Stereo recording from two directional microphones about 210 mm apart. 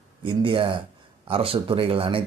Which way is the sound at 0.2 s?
25° right (ahead or behind).